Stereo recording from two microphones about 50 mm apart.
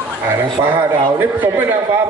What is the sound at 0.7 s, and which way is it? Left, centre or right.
Speech, right.